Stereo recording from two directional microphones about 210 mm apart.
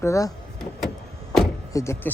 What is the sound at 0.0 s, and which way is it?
Speech, 15° left (ahead or behind).